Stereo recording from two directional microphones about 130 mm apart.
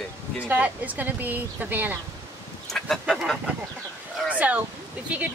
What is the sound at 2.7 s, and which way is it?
Speech, 5° left (ahead or behind).